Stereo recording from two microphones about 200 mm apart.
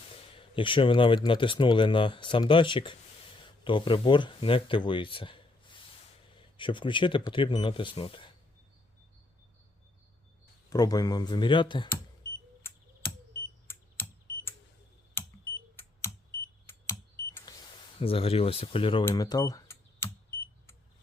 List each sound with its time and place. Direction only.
0.3 s speech: 25° left (ahead or behind)
10.7 s speech: 20° left (ahead or behind)
13.7 s fire alarm: 10° left (ahead or behind)
15.2 s a sound: 10° left (ahead or behind)
18.0 s speech: 30° left (ahead or behind)
19.0 s cash register: 20° left (ahead or behind)